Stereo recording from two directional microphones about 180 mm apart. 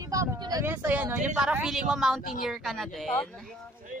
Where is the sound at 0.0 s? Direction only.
20° right (ahead or behind); by 3.3 s 5° left (ahead or behind).